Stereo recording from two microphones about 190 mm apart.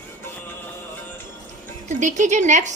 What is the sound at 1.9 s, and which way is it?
Speech, 40° right (ahead or behind).